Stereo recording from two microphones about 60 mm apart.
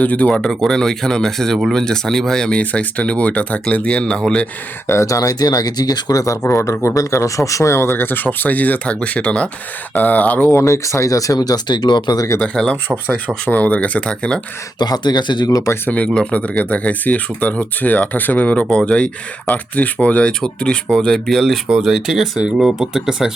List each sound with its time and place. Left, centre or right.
0.0 s speech: left
4.9 s speech: left
6.4 s speech: left
6.9 s speech: left
10.5 s speech: left
12.6 s speech: centre
13.1 s speech: left
14.0 s speech: centre
15.1 s speech: left
15.4 s speech: left
16.0 s speech: centre
18.6 s speech: centre
21.7 s speech: centre